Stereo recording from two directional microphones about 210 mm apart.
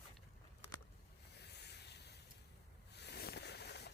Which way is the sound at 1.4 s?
55° left (ahead or behind).